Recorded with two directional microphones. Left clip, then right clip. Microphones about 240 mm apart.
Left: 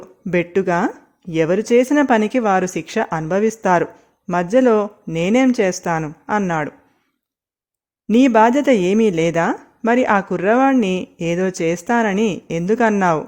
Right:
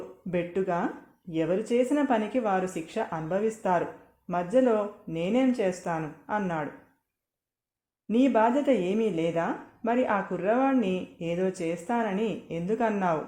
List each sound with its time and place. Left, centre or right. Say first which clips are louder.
0.3 s chopping: left 11 dB; left
8.0 s chopping: left 11 dB; left